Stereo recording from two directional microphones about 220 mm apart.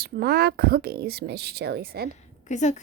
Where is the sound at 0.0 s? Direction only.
45° right (ahead or behind).